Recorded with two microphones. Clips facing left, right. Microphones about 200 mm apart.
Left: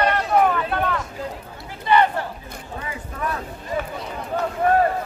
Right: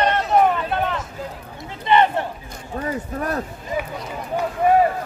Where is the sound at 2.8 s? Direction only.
45° right (ahead or behind).